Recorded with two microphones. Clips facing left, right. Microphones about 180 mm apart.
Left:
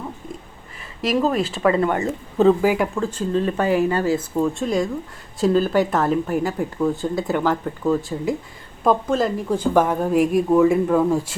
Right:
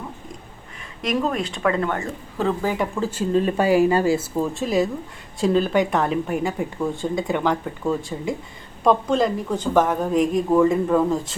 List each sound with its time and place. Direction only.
1.0 s speech: centre (ahead or behind)
2.0 s speech: 20° left (ahead or behind)
2.6 s a woman's voice: 5° left (ahead or behind)